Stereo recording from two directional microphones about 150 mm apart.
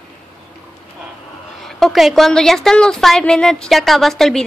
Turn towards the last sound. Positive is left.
turn(degrees=5)  # may be behind; listen again after turning